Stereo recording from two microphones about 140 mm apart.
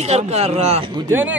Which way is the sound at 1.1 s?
15° right (ahead or behind).